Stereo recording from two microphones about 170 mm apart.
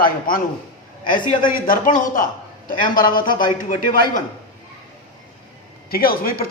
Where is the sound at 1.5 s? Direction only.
55° left (ahead or behind).